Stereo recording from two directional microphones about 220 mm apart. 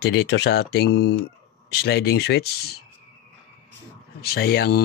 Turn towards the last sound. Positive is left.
turn(degrees=45)  # may be behind; listen again after turning